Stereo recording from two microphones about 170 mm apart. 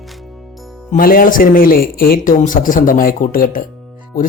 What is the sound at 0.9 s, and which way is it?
Speech, 55° left (ahead or behind).